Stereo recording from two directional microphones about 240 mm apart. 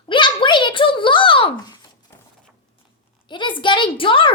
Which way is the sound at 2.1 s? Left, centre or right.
Centre.